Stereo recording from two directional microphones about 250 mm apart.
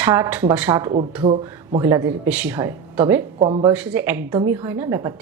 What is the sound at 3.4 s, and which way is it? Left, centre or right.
Speech, right.